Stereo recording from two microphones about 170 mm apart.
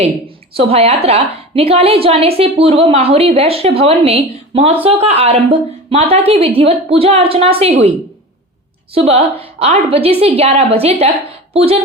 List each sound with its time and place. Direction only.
0.5 s a woman's voice: 35° right (ahead or behind)
8.9 s a woman's voice: 35° right (ahead or behind)